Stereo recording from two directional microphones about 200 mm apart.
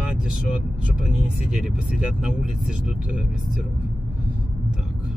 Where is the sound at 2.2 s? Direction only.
5° right (ahead or behind).